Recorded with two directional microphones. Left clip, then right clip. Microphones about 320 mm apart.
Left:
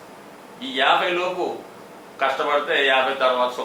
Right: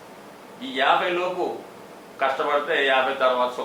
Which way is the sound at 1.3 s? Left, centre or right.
Right.